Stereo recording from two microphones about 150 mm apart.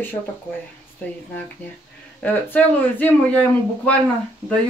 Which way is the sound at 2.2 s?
10° left (ahead or behind).